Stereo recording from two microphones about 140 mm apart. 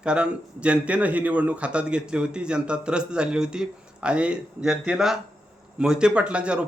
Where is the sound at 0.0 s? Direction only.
5° right (ahead or behind).